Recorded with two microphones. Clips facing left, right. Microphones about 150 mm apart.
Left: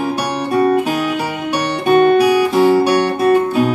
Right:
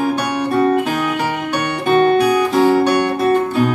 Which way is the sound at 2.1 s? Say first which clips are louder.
Left 2 dB; 5° left (ahead or behind).